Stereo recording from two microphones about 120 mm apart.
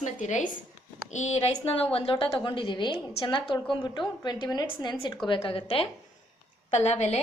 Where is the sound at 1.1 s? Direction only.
75° left (ahead or behind).